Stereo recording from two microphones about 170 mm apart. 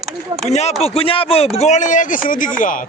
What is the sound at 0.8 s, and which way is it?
Speech, 35° left (ahead or behind).